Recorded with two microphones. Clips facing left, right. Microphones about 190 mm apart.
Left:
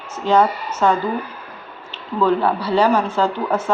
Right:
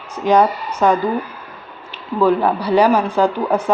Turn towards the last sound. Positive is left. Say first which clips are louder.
# right 3 dB
turn(degrees=-15)  # may be behind; listen again after turning